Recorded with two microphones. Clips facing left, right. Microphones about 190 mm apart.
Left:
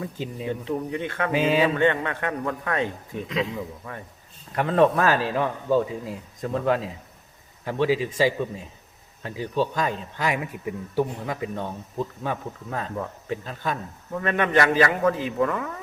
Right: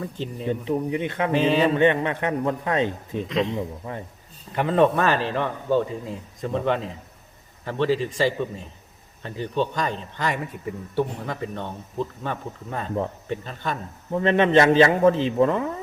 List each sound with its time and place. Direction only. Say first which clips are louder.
0.0 s a man's voice: right 1 dB; 5° left (ahead or behind)
0.6 s a man's voice: right 4 dB; 20° right (ahead or behind)
1.3 s speech: right 1 dB; 5° left (ahead or behind)
1.7 s a man's voice: right 3 dB; 20° right (ahead or behind)
3.2 s a man's voice: right 3 dB; centre (ahead or behind)
3.5 s a man's voice: right 4 dB; 25° right (ahead or behind)
4.5 s a man's voice: even; centre (ahead or behind)
14.1 s a man's voice: right 5 dB; 25° right (ahead or behind)